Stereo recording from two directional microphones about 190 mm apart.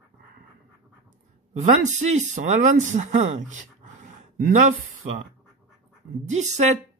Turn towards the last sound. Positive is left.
turn(degrees=-40)  # may be behind; listen again after turning